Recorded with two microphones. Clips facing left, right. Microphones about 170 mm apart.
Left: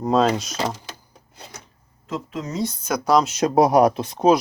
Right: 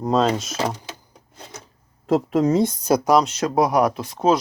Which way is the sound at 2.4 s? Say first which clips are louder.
Right 6 dB; 55° right (ahead or behind).